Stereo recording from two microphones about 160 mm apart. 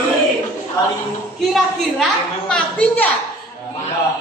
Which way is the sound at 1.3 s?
Centre (ahead or behind).